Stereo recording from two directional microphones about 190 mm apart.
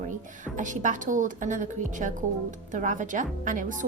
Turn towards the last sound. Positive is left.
turn(degrees=-45)  # may be behind; listen again after turning